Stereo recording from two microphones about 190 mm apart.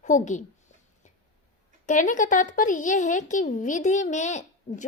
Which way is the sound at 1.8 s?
40° left (ahead or behind).